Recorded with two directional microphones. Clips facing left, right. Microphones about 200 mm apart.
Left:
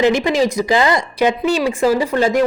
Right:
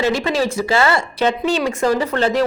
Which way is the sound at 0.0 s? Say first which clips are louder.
Left 4 dB; 15° left (ahead or behind).